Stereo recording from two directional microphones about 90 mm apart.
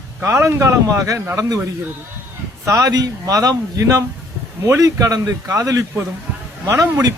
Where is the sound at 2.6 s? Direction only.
40° right (ahead or behind).